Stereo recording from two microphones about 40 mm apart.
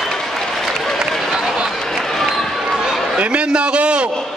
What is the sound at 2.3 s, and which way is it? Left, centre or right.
Basketball bounce, centre.